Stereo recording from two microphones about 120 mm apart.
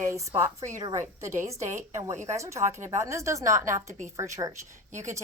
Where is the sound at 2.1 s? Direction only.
75° right (ahead or behind).